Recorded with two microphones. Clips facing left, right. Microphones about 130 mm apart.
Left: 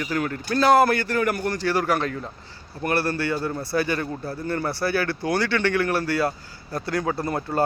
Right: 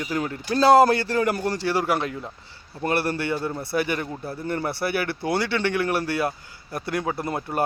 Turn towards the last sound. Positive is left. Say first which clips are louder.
# left 2 dB
turn(degrees=-20)  # may be behind; listen again after turning